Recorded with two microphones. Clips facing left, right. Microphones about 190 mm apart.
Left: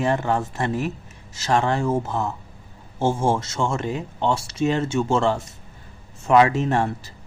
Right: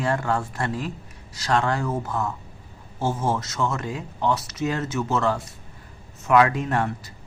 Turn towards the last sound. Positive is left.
turn(degrees=25)  # may be behind; listen again after turning